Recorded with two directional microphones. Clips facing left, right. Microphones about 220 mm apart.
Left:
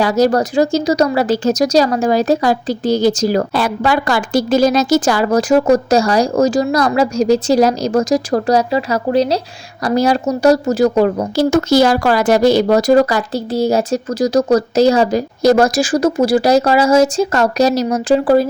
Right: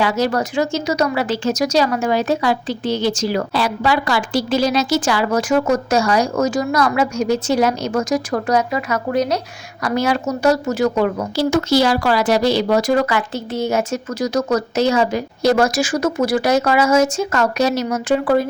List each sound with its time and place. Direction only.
0.0 s speech: 40° left (ahead or behind)